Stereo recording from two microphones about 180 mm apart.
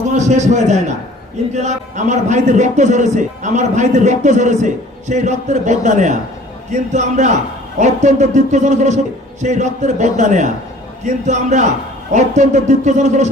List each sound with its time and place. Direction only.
0.1 s a man's voice: 40° right (ahead or behind)